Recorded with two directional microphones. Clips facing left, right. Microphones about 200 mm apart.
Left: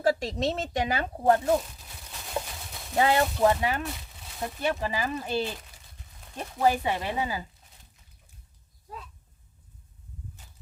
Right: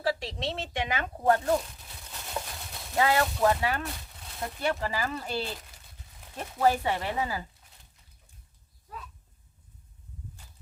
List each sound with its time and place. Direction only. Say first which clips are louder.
0.0 s speech: left 5 dB; 45° left (ahead or behind)
1.5 s a sound: left 2 dB; centre (ahead or behind)
2.9 s speech: left 2 dB; 25° left (ahead or behind)